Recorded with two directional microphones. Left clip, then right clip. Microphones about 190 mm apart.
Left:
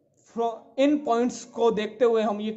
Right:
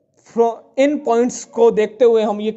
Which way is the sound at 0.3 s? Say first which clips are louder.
Right 11 dB; 30° right (ahead or behind).